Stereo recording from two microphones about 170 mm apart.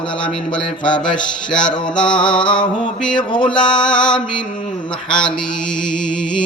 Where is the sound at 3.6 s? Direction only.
25° left (ahead or behind).